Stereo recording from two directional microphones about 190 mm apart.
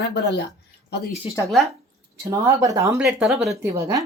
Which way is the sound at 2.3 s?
15° right (ahead or behind).